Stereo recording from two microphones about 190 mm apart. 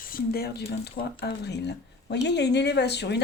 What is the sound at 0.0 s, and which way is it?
Speech, 50° left (ahead or behind).